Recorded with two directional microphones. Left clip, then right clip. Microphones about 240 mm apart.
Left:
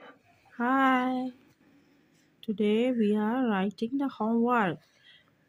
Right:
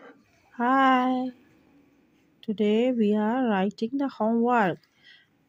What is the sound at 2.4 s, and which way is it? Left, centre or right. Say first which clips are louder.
Speech: right 3 dB; centre.